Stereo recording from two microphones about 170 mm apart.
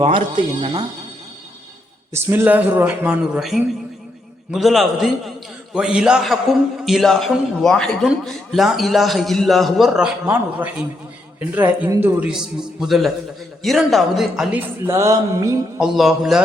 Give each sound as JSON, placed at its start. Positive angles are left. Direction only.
{"t": 0.0, "sound": "speech", "side_deg": -30}
{"t": 2.1, "sound": "a man's voice", "side_deg": -15}
{"t": 14.8, "sound": "speech", "side_deg": -20}
{"t": 15.8, "sound": "a man's voice", "side_deg": -5}